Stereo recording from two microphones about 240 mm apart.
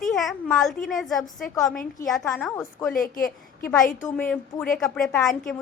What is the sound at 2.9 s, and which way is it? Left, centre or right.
Speech, left.